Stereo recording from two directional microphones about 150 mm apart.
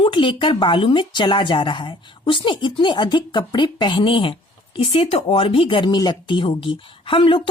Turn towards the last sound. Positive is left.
turn(degrees=35)  # may be behind; listen again after turning